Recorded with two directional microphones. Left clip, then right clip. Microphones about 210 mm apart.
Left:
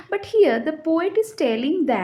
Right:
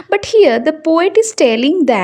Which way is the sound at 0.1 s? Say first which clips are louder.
Right 8 dB; 45° right (ahead or behind).